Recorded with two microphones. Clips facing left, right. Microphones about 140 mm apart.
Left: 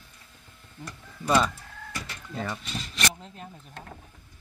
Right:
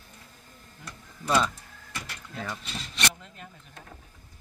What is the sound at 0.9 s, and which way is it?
Speech, 5° left (ahead or behind).